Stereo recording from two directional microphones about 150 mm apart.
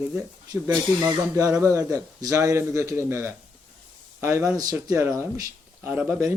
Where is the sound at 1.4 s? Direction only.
25° right (ahead or behind).